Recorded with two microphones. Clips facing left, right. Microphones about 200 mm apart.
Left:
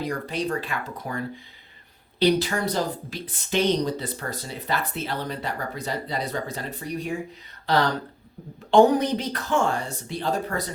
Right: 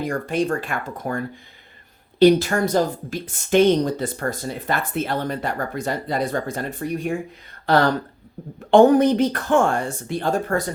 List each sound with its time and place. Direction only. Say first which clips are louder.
0.0 s a woman's voice: right 5 dB; 50° right (ahead or behind)
8.7 s a woman's voice: right 4 dB; 55° right (ahead or behind)